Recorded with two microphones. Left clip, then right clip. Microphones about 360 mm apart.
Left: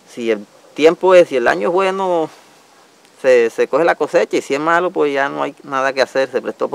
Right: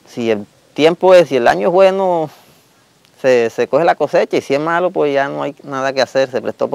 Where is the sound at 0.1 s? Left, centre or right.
Right.